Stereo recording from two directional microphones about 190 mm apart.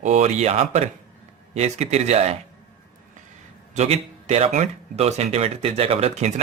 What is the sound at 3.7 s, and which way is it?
Speech, 35° right (ahead or behind).